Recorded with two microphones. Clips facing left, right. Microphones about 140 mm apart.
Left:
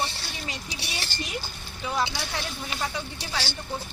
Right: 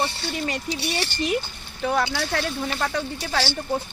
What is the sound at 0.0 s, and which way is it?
Speech, 55° right (ahead or behind).